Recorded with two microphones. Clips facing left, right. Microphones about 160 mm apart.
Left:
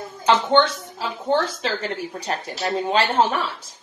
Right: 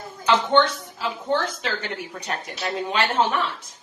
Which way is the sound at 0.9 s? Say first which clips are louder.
Left 3 dB; 35° left (ahead or behind).